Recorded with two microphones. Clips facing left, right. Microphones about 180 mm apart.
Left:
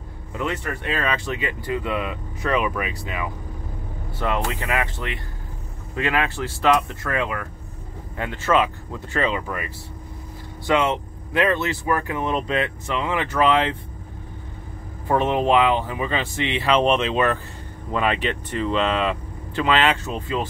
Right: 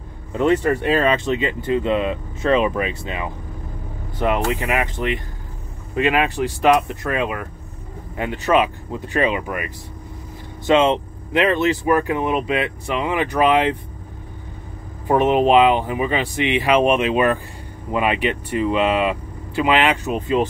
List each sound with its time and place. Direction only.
0.3 s speech: 30° right (ahead or behind); by 9.7 s 15° right (ahead or behind)
10.7 s speech: 20° right (ahead or behind)
15.0 s speech: 20° right (ahead or behind)